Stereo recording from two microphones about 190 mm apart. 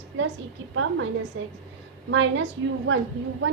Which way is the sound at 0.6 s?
85° right.